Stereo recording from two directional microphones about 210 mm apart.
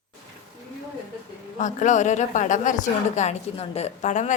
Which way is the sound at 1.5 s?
35° left (ahead or behind).